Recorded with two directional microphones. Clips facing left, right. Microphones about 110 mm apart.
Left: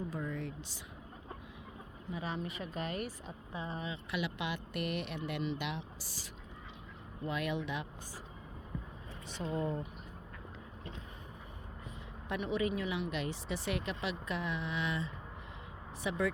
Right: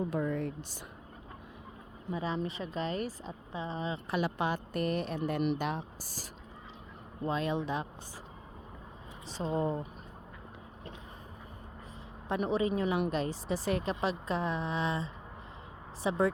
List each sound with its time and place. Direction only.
0.1 s speech: 60° right (ahead or behind)
2.1 s speech: 35° right (ahead or behind)
3.9 s speech: 40° right (ahead or behind)
7.3 s speech: 30° right (ahead or behind)
9.3 s speech: 30° right (ahead or behind)
12.3 s speech: 35° right (ahead or behind)